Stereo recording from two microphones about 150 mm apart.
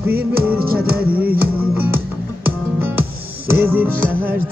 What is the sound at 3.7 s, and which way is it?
Speech, 15° right (ahead or behind).